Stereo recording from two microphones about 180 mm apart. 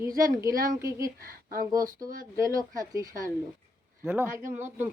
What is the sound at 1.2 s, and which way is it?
Speech, 50° right (ahead or behind).